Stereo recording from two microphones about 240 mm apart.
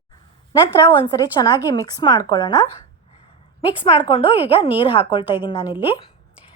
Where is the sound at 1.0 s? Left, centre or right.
Centre.